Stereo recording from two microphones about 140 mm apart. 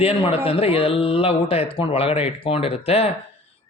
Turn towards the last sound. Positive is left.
turn(degrees=45)  # may be behind; listen again after turning